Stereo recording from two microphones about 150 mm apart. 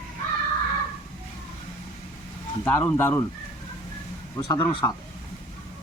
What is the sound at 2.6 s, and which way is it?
Speech, 15° left (ahead or behind).